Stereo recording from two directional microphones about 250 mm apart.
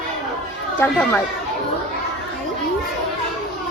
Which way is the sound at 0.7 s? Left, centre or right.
Centre.